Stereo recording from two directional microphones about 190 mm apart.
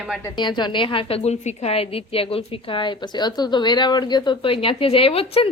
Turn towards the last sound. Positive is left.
turn(degrees=30)  # may be behind; listen again after turning